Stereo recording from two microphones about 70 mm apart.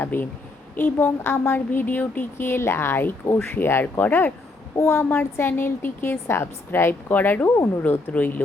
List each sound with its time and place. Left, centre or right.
0.0 s a woman's voice: left
7.4 s speech: left
7.8 s speech: left